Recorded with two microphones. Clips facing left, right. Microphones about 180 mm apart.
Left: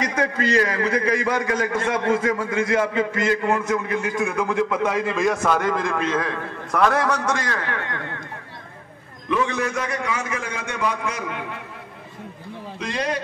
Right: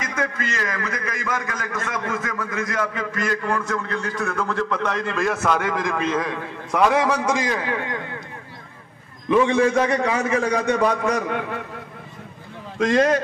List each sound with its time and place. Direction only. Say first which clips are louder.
0.0 s a man's voice: left 4 dB; 35° left (ahead or behind); by 8.0 s 15° right (ahead or behind)
9.3 s a man's voice: right 6 dB; 30° right (ahead or behind)
12.7 s a man's voice: right 9 dB; 45° right (ahead or behind)